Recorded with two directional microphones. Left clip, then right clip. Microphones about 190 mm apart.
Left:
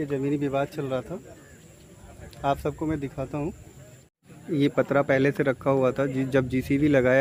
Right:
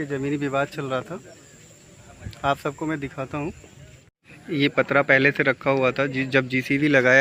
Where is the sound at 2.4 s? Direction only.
5° right (ahead or behind).